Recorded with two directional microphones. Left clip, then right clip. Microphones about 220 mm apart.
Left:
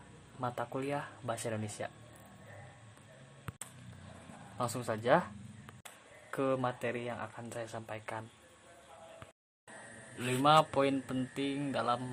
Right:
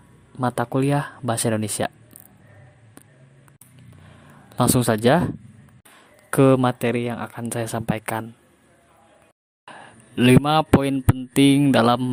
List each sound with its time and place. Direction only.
0.3 s speech: 45° right (ahead or behind)
4.5 s speech: 45° right (ahead or behind)
6.3 s speech: 45° right (ahead or behind)
10.2 s speech: 45° right (ahead or behind)